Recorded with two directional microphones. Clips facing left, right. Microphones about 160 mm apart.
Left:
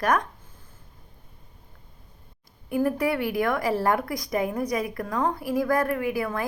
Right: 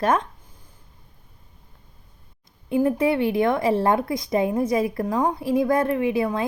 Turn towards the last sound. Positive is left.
turn(degrees=-25)  # may be behind; listen again after turning